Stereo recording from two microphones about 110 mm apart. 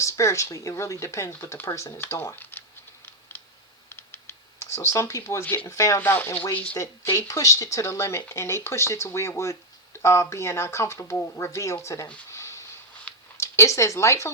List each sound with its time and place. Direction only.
0.0 s speech: 25° left (ahead or behind)
3.8 s computer keyboard: 20° left (ahead or behind)
6.0 s speech: 20° left (ahead or behind)
6.7 s speech: 25° left (ahead or behind)
12.3 s a sound: 25° left (ahead or behind)
13.3 s speech: 25° left (ahead or behind)